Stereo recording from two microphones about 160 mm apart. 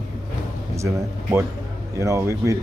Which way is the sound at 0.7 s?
15° right (ahead or behind).